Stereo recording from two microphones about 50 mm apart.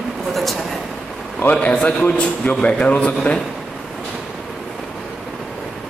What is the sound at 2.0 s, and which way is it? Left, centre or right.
A man's voice, left.